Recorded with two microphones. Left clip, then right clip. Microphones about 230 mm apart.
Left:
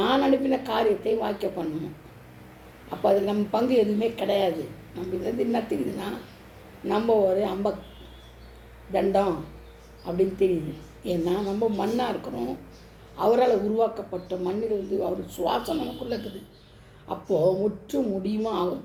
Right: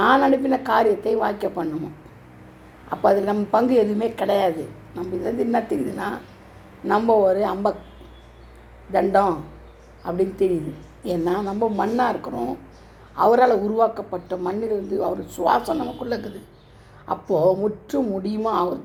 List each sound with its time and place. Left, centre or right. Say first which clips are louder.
0.0 s a woman's voice: right 6 dB; right
2.9 s a woman's voice: right 4 dB; right
8.9 s a woman's voice: right 5 dB; right